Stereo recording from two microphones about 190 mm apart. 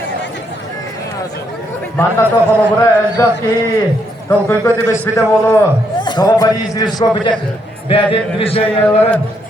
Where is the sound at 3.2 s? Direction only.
15° left (ahead or behind).